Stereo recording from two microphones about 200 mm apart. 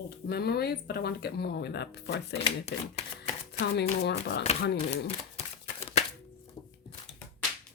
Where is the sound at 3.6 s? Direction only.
55° left (ahead or behind).